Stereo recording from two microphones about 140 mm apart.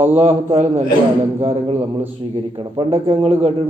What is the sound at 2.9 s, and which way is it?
Speech, 50° right (ahead or behind).